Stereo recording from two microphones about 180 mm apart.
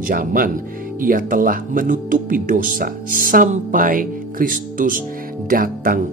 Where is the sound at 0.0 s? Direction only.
50° right (ahead or behind).